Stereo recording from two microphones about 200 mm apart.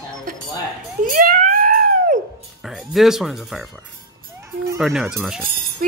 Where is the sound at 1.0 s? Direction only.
45° right (ahead or behind).